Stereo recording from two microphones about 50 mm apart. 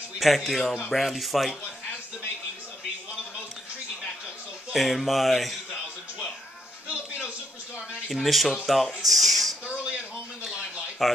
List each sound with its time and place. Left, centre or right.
0.2 s speech: centre
4.7 s music: centre
6.9 s television: right
8.1 s speech: centre
9.7 s a sound: centre
10.4 s a sound: centre